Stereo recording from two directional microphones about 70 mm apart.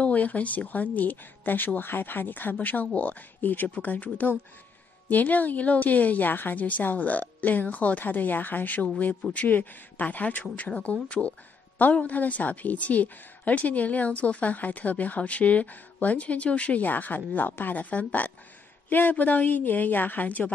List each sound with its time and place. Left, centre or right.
0.0 s a woman's voice: left